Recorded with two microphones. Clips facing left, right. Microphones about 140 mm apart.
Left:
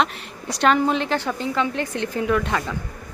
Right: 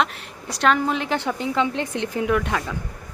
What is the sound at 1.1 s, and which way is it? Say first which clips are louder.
Speech: even; 15° right (ahead or behind).